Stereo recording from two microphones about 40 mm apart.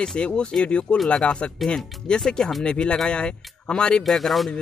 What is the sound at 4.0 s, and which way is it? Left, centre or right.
Speech, centre.